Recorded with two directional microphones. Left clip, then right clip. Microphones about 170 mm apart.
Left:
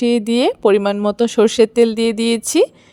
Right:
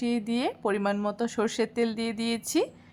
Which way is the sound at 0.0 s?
40° left (ahead or behind).